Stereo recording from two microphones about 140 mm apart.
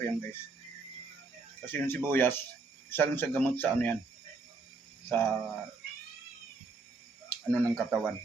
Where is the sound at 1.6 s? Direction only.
15° left (ahead or behind).